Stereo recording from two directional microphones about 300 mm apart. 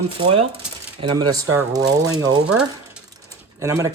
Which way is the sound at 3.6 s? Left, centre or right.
Centre.